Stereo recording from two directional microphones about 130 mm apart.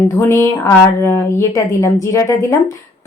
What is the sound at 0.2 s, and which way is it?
A woman's voice, 20° left (ahead or behind).